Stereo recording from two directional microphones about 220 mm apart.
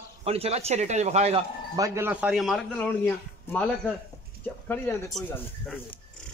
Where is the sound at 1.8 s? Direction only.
10° right (ahead or behind); by 5.8 s 5° left (ahead or behind).